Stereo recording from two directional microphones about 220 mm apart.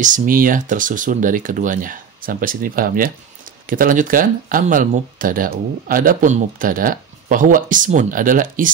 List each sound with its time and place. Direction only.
0.0 s speech: 35° right (ahead or behind)